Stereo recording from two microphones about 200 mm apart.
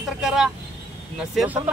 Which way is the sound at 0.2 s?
Centre (ahead or behind).